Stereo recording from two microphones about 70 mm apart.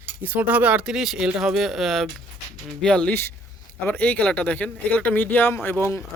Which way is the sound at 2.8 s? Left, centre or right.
Centre.